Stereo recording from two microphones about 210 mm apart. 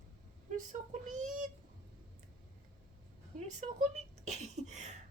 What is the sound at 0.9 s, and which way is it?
Speech, 35° right (ahead or behind).